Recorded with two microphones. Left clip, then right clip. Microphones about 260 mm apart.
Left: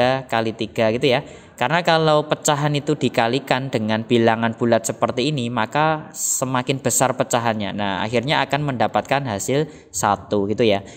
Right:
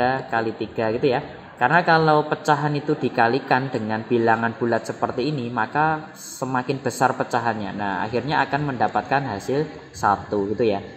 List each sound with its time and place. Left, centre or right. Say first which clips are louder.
0.0 s a man's voice: left 3 dB; left